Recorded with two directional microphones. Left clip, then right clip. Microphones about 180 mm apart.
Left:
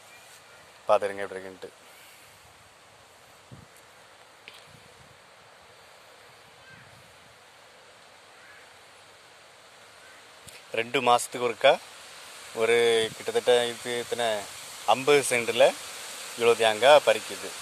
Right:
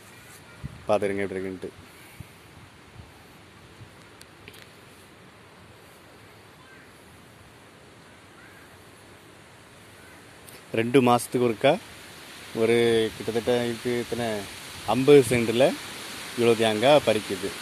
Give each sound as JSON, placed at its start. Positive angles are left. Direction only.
{"t": 0.8, "sound": "speech", "side_deg": 0}
{"t": 10.5, "sound": "speech", "side_deg": 0}
{"t": 14.9, "sound": "speech", "side_deg": 10}